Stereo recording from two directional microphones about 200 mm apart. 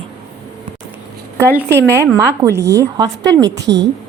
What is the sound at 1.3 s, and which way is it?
A woman's voice, 10° right (ahead or behind).